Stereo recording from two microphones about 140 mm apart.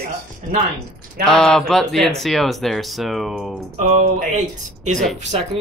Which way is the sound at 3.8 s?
55° right (ahead or behind).